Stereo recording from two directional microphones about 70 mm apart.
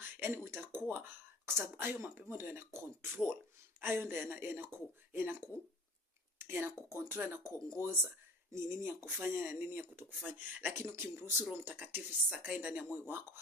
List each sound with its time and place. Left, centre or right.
0.0 s speech: right
10.8 s speech: right
11.5 s speech: right